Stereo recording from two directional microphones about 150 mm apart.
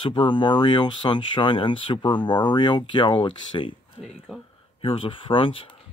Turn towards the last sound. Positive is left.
turn(degrees=35)  # may be behind; listen again after turning